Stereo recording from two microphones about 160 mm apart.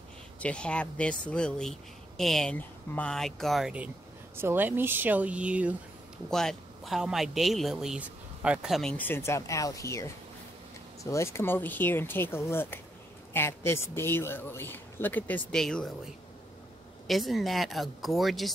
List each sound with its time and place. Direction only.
0.4 s speech: 5° left (ahead or behind)
8.9 s a man's voice: 15° left (ahead or behind)
17.1 s speech: centre (ahead or behind)